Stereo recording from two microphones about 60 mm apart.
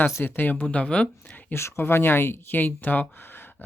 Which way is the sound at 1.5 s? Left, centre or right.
Left.